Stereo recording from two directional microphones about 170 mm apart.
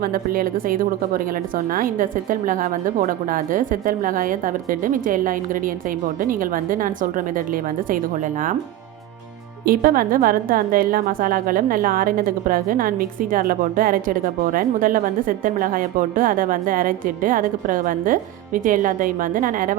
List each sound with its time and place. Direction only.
0.0 s a woman's voice: 60° right (ahead or behind)
9.6 s speech: 55° right (ahead or behind)